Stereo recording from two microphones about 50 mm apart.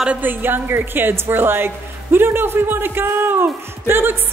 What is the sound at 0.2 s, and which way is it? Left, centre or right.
Speech, right.